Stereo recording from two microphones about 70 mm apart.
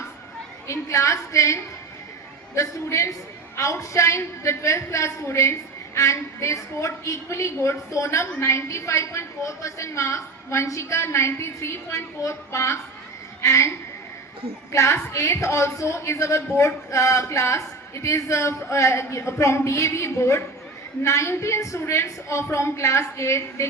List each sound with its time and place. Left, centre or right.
0.7 s a woman's voice: left
2.6 s a woman's voice: left